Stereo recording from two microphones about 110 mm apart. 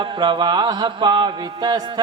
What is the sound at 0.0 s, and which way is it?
Music, 45° right (ahead or behind).